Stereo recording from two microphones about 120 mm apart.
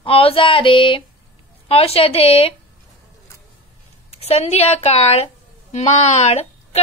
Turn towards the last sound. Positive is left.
turn(degrees=65)  # may be behind; listen again after turning